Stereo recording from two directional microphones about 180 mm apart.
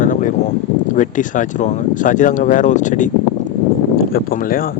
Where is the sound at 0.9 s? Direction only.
45° left (ahead or behind).